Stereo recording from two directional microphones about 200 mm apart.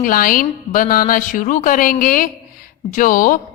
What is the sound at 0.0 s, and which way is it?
A woman's voice, 45° left (ahead or behind).